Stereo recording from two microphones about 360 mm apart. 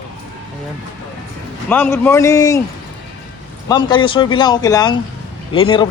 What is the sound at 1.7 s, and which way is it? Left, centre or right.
Speech, centre.